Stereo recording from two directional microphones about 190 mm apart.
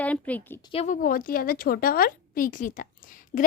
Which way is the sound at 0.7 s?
40° left (ahead or behind).